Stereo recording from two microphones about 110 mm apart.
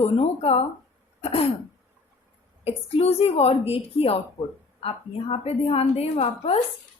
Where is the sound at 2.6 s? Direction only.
70° left (ahead or behind).